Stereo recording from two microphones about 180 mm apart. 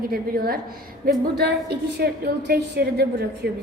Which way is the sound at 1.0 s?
65° right (ahead or behind).